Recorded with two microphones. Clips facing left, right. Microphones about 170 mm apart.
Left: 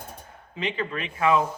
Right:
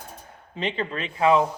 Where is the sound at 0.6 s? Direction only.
30° right (ahead or behind).